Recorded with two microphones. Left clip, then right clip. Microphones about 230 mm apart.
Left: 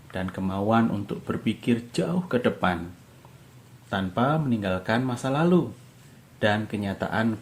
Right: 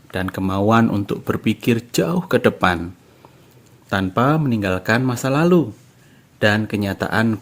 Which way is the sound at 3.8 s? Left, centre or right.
Right.